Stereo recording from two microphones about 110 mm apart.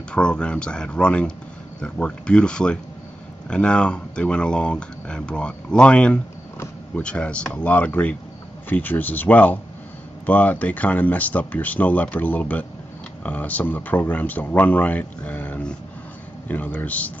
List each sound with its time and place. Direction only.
0.1 s speech: 10° left (ahead or behind)